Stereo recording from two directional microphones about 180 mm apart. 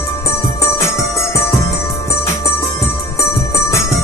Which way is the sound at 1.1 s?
15° left (ahead or behind).